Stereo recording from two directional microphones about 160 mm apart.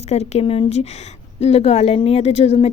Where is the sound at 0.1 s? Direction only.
40° left (ahead or behind).